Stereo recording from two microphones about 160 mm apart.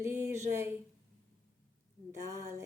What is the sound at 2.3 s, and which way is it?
Speech, 20° right (ahead or behind).